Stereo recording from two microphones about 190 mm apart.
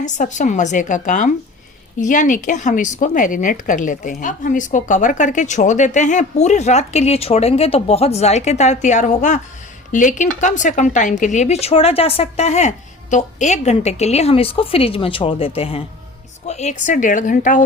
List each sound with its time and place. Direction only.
0.0 s a woman's voice: 40° left (ahead or behind)